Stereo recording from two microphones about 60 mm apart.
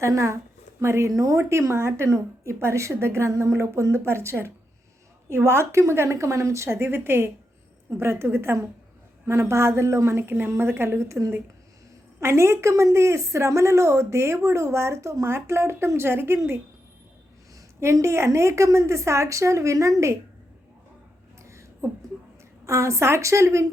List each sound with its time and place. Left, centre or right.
0.0 s a woman's voice: right
17.7 s a woman's voice: right
22.6 s a woman's voice: right